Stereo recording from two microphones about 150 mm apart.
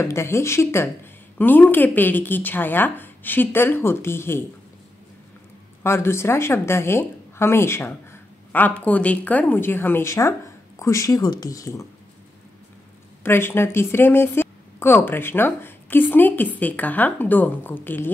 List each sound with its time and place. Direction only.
0.0 s a woman's voice: 20° left (ahead or behind)
5.9 s a woman's voice: 15° left (ahead or behind)
13.2 s a woman's voice: 15° left (ahead or behind)